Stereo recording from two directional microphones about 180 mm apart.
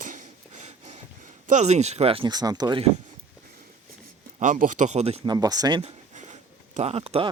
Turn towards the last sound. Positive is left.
turn(degrees=-35)  # may be behind; listen again after turning